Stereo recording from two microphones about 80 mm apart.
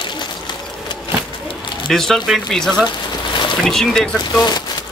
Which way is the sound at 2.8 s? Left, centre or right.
Left.